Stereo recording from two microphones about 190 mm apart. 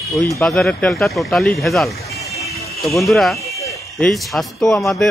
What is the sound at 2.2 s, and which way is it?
Vehicle, centre (ahead or behind).